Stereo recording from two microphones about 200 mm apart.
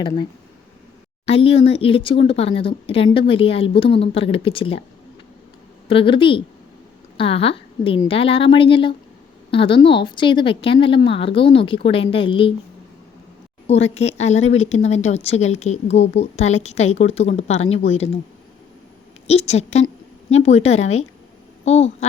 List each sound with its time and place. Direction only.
1.2 s speech: 30° left (ahead or behind)
5.9 s a woman's voice: 25° left (ahead or behind)
13.7 s speech: 35° left (ahead or behind)
19.3 s a woman's voice: 30° left (ahead or behind)